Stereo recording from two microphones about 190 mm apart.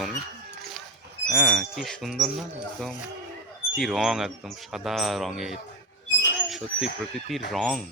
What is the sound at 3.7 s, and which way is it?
Speech, centre (ahead or behind).